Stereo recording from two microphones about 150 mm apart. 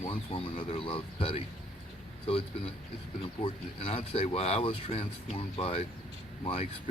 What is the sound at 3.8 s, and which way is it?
Speech, 40° left (ahead or behind).